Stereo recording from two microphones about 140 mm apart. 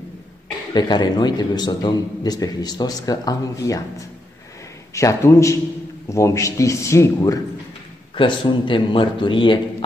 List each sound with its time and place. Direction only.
0.7 s a man's voice: 30° left (ahead or behind)
8.2 s a man's voice: 35° left (ahead or behind)